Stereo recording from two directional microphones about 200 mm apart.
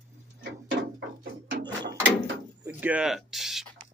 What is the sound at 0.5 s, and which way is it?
Ratchet, 65° right (ahead or behind).